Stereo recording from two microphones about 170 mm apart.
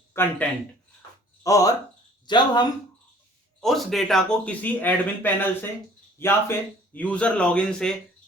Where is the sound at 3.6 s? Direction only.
Centre (ahead or behind).